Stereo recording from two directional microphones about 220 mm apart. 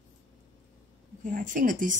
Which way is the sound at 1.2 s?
35° right (ahead or behind).